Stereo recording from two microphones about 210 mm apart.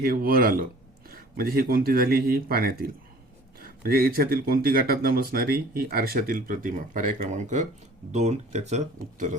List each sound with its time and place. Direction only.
0.0 s speech: 45° right (ahead or behind)